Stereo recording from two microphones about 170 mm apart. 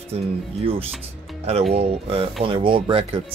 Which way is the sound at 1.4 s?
35° right (ahead or behind).